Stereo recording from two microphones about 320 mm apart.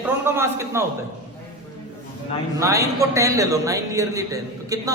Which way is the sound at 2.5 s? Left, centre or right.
Centre.